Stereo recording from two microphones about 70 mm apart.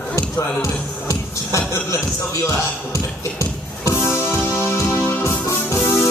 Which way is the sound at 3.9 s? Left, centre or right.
Left.